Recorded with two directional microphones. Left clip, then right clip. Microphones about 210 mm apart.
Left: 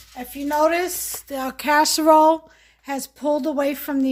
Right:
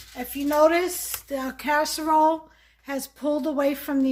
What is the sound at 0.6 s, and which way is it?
Speech, 45° left (ahead or behind).